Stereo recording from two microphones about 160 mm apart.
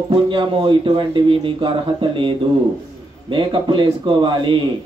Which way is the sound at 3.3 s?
30° right (ahead or behind).